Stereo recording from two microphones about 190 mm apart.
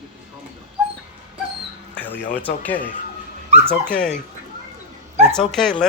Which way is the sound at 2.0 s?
10° left (ahead or behind).